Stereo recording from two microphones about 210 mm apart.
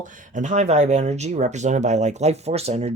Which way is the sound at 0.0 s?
40° right (ahead or behind).